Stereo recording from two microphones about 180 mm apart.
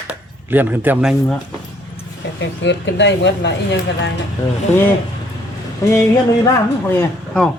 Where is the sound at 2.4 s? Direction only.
80° left.